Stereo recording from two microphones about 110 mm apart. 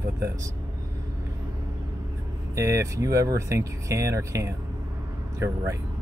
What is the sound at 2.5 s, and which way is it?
Speech, 25° right (ahead or behind).